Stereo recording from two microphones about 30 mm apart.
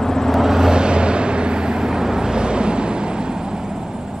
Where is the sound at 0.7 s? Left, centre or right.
Right.